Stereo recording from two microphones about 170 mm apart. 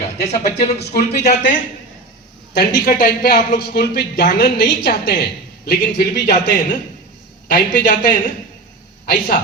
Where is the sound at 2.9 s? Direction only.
50° left (ahead or behind).